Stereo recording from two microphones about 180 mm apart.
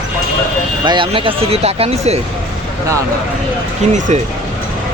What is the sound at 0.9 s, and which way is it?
Speech, 30° right (ahead or behind).